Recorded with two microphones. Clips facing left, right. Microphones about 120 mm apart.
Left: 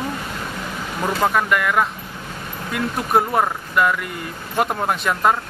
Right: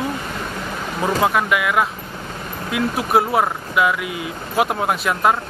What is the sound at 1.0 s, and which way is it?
Speech, 5° right (ahead or behind).